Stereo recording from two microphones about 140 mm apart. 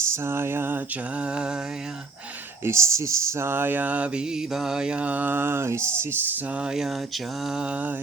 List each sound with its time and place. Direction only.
0.0 s a sound: 20° right (ahead or behind)
1.2 s speech: 5° right (ahead or behind)
2.6 s speech: 20° right (ahead or behind)